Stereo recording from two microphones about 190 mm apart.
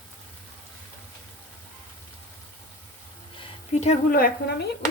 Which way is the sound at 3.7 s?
35° left (ahead or behind).